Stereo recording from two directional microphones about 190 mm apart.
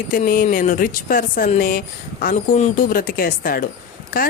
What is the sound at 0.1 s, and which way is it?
Speech, 45° left (ahead or behind).